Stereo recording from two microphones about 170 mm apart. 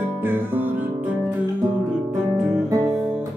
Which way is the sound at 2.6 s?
20° right (ahead or behind).